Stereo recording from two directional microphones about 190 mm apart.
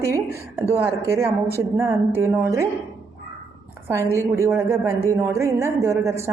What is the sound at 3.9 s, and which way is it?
A woman's voice, 15° right (ahead or behind).